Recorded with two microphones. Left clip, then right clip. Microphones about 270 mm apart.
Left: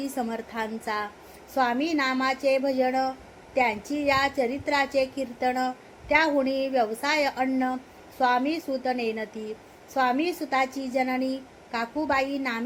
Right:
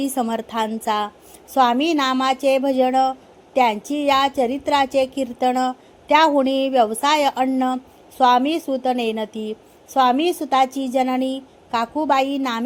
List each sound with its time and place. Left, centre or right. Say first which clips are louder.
0.0 s a woman's voice: right 8 dB; right